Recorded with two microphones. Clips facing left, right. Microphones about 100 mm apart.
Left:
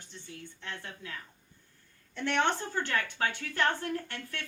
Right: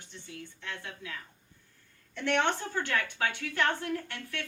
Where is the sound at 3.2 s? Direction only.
35° left (ahead or behind).